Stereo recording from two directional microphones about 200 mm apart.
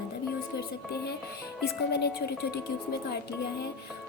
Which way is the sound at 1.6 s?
55° left (ahead or behind).